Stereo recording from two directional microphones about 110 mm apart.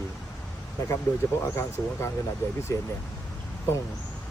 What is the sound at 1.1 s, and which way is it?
Speech, 25° left (ahead or behind).